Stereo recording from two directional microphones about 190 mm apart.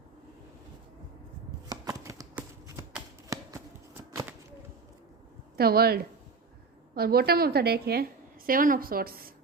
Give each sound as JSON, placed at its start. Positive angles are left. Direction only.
{"t": 1.7, "sound": "shuffling cards", "side_deg": -15}
{"t": 4.1, "sound": "a sound", "side_deg": -15}
{"t": 5.5, "sound": "a woman's voice", "side_deg": -55}